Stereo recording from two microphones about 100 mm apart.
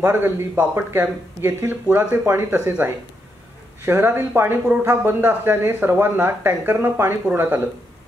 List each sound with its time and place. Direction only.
0.0 s speech: 20° right (ahead or behind)
3.8 s speech: 25° right (ahead or behind)